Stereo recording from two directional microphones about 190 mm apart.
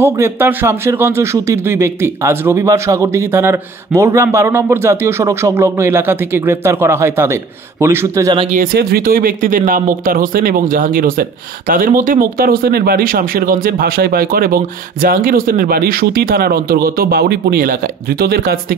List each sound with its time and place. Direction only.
0.0 s speech: 10° right (ahead or behind)
8.5 s speech: 50° right (ahead or behind)